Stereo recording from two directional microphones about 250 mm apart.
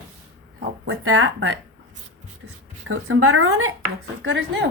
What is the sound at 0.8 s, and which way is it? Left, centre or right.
Speech, right.